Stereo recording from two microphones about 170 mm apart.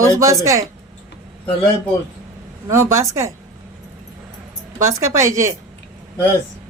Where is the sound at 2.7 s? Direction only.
15° right (ahead or behind).